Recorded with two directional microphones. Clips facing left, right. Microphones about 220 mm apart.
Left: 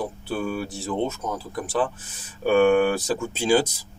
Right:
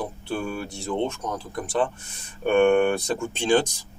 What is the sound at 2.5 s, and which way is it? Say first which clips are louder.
Speech: left 1 dB; 5° left (ahead or behind).